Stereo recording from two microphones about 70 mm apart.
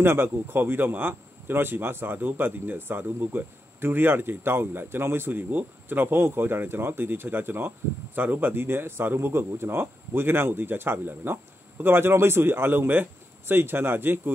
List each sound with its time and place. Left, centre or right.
0.0 s speech: right